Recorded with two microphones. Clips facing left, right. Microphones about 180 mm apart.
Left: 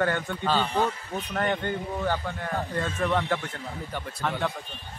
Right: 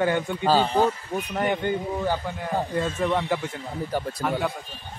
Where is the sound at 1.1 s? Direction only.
10° right (ahead or behind).